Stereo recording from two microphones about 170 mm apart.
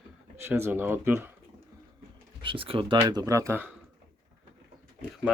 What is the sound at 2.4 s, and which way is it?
Speech, 30° right (ahead or behind).